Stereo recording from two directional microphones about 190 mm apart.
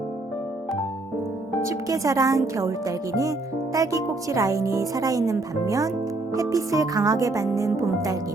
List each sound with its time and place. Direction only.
1.6 s speech: 15° right (ahead or behind)